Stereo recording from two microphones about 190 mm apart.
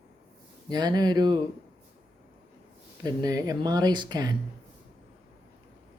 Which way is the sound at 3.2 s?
20° right (ahead or behind).